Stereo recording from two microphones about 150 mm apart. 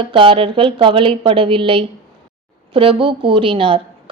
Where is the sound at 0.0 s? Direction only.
35° right (ahead or behind).